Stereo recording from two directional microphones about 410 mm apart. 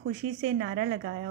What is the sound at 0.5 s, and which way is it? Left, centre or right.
Speech, right.